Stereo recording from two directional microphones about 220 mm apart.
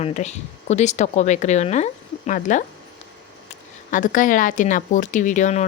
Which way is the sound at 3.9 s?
35° left (ahead or behind).